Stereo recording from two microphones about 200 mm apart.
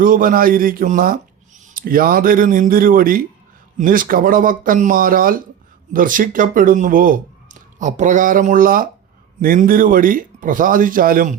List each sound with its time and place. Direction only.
0.0 s speech: 45° right (ahead or behind)